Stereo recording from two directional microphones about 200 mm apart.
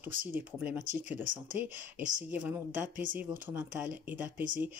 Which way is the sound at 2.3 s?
10° right (ahead or behind).